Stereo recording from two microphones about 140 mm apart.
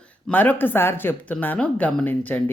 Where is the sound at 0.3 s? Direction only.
10° left (ahead or behind).